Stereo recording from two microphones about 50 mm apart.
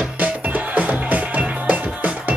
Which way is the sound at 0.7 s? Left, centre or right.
Right.